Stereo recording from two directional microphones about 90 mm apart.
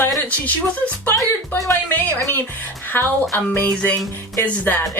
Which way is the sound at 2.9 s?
25° left (ahead or behind).